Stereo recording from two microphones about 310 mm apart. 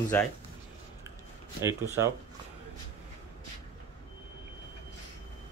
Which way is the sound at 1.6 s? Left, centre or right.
Centre.